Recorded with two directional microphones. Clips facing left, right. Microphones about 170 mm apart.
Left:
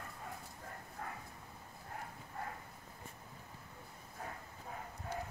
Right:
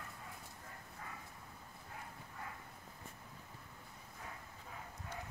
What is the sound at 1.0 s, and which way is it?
Dog, 55° left (ahead or behind).